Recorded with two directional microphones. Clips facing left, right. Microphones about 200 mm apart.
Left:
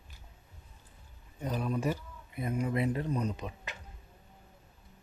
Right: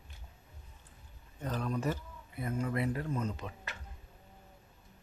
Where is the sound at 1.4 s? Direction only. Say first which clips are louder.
Left 2 dB; 10° left (ahead or behind).